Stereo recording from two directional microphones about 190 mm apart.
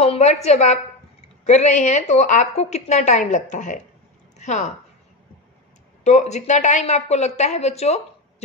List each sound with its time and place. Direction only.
0.0 s a sound: 35° left (ahead or behind)
1.4 s a woman's voice: 35° left (ahead or behind)
6.0 s a woman's voice: 35° left (ahead or behind)